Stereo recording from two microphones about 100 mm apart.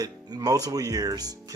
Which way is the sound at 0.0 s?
40° right (ahead or behind).